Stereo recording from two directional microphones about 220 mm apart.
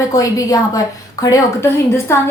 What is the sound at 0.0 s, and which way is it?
A woman's voice, 15° left (ahead or behind).